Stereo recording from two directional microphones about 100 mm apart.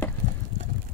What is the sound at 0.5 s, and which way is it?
Vehicle, 35° left (ahead or behind).